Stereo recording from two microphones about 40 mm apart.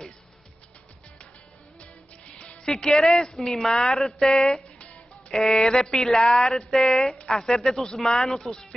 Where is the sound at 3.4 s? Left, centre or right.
Centre.